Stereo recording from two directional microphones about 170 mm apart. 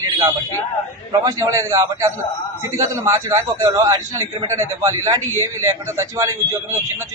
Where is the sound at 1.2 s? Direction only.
20° right (ahead or behind).